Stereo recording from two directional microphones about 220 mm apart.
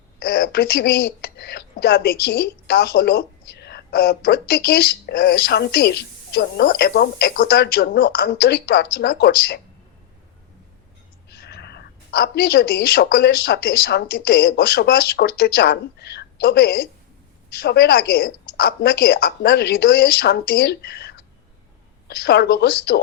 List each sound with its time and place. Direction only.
0.2 s speech: 45° left (ahead or behind)
11.3 s a woman's voice: 45° left (ahead or behind)